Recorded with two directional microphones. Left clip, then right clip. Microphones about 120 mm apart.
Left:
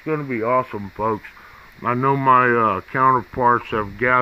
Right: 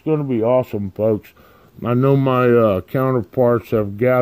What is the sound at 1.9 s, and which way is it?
Speech, 45° right (ahead or behind).